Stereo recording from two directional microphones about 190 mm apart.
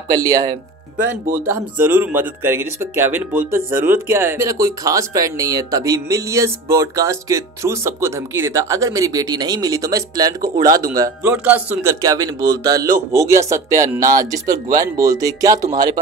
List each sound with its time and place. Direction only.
0.1 s speech: 20° right (ahead or behind)